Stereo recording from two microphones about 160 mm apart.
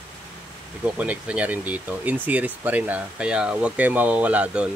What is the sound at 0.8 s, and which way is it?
Speech, 10° right (ahead or behind).